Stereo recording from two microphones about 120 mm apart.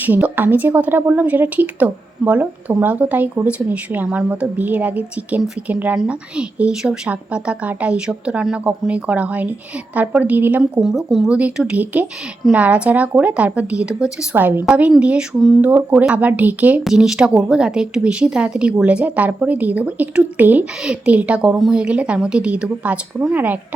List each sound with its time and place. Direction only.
0.0 s speech: 15° right (ahead or behind)
10.6 s speech: 5° right (ahead or behind)